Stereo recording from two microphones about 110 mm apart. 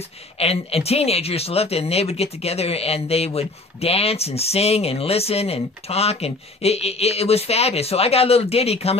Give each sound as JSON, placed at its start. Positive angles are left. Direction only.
{"t": 0.4, "sound": "speech", "side_deg": 65}